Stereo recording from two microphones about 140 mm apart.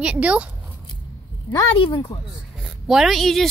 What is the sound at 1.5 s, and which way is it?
Speech, 30° left (ahead or behind).